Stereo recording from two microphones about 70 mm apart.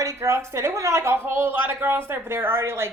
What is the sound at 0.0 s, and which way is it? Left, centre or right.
Speech, right.